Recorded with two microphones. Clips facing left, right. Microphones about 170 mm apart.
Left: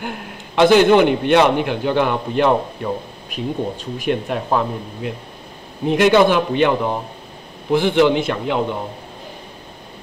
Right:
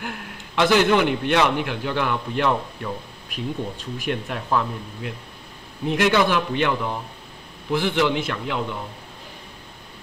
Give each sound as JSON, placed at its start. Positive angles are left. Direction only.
{"t": 0.0, "sound": "a man's voice", "side_deg": 25}